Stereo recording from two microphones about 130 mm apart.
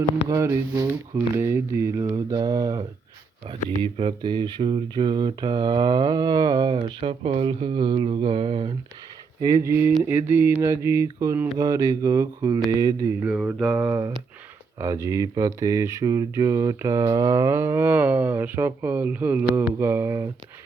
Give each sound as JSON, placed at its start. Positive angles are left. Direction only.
{"t": 0.3, "sound": "speech", "side_deg": -20}
{"t": 3.4, "sound": "speech", "side_deg": -50}
{"t": 9.4, "sound": "speech", "side_deg": -25}
{"t": 13.2, "sound": "mantra", "side_deg": -5}
{"t": 14.8, "sound": "speech", "side_deg": -25}